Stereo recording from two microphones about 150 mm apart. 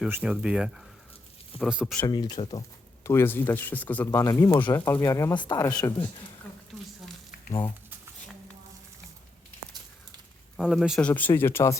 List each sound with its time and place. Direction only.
0.1 s speech: 10° right (ahead or behind)
2.0 s speech: 30° left (ahead or behind)
3.0 s speech: 15° left (ahead or behind)
6.7 s a sound: 5° left (ahead or behind)
10.6 s speech: centre (ahead or behind)
11.1 s speech: 10° left (ahead or behind)